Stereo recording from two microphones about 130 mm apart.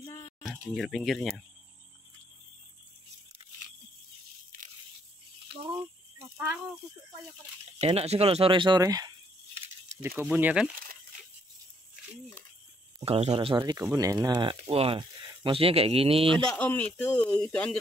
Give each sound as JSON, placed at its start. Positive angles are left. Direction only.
{"t": 0.7, "sound": "speech", "side_deg": 0}
{"t": 5.7, "sound": "a sound", "side_deg": -20}
{"t": 7.8, "sound": "speech", "side_deg": -50}
{"t": 8.8, "sound": "speech", "side_deg": -30}
{"t": 10.0, "sound": "speech", "side_deg": -15}
{"t": 13.0, "sound": "speech", "side_deg": -50}
{"t": 13.6, "sound": "speech", "side_deg": -25}
{"t": 14.7, "sound": "speech", "side_deg": -45}
{"t": 16.5, "sound": "speech", "side_deg": 10}